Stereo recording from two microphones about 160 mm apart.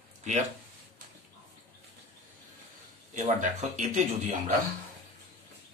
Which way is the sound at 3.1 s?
50° right (ahead or behind).